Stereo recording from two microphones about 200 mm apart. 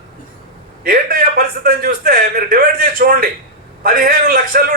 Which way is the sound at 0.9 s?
45° right (ahead or behind).